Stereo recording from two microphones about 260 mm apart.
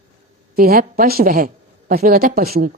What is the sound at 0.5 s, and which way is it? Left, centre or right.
A woman's voice, right.